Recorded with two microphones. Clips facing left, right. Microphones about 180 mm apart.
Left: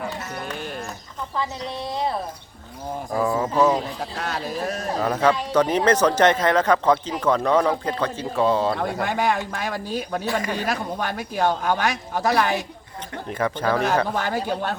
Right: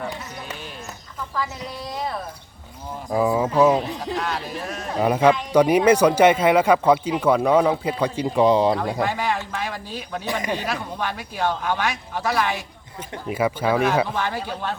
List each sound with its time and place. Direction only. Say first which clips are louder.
1.4 s a woman's voice: left 2 dB; 25° left (ahead or behind)
3.2 s speech: right 2 dB; 10° right (ahead or behind)
4.2 s a man's voice: left 1 dB; 40° left (ahead or behind)
4.9 s speech: right 4 dB; 10° right (ahead or behind)
9.0 s a man's voice: left 2 dB; 50° left (ahead or behind)
13.2 s speech: right 2 dB; 10° right (ahead or behind)
14.1 s speech: left 2 dB; 45° left (ahead or behind)